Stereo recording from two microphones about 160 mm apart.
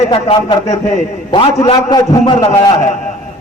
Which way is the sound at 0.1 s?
30° left (ahead or behind).